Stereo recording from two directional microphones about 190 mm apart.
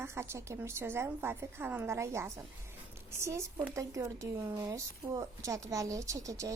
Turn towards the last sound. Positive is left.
turn(degrees=-15)  # may be behind; listen again after turning